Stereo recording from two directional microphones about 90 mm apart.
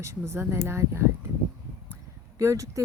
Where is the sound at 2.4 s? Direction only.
35° right (ahead or behind).